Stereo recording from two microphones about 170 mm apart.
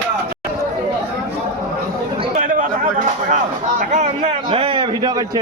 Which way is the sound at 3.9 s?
40° right (ahead or behind).